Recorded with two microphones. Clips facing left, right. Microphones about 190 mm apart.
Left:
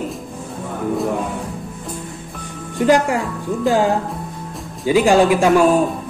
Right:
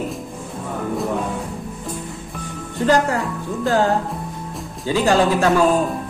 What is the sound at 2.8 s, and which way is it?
A man's voice, 15° left (ahead or behind).